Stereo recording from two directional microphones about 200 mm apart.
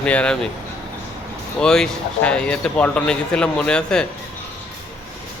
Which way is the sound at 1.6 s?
5° left (ahead or behind).